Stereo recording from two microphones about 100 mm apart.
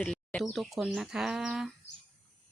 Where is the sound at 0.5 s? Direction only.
Centre (ahead or behind).